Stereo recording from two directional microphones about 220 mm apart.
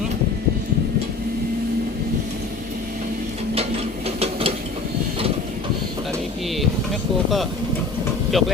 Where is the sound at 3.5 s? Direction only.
30° right (ahead or behind).